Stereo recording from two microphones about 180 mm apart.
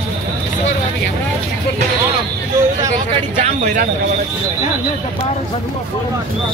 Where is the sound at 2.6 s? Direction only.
15° right (ahead or behind).